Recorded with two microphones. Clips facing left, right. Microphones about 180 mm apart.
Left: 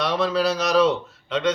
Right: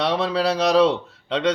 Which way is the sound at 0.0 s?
30° right (ahead or behind).